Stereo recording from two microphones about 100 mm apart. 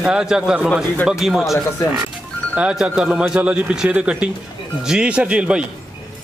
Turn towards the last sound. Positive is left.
turn(degrees=-10)  # may be behind; listen again after turning